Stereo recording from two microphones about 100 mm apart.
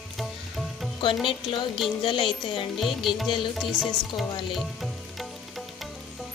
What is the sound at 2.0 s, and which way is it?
Music, 55° left (ahead or behind).